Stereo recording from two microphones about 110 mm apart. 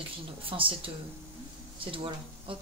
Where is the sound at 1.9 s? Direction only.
55° right (ahead or behind).